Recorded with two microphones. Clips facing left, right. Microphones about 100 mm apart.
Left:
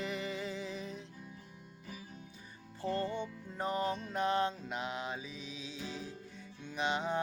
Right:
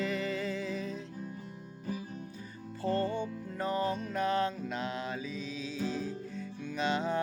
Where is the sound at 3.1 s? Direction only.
45° right (ahead or behind).